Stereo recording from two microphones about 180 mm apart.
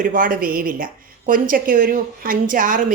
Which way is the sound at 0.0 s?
50° right (ahead or behind).